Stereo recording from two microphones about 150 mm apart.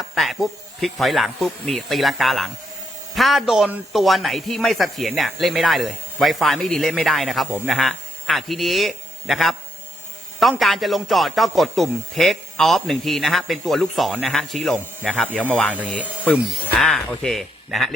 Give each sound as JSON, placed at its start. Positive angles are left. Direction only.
{"t": 0.1, "sound": "a man's voice", "side_deg": 0}
{"t": 10.6, "sound": "speech", "side_deg": 0}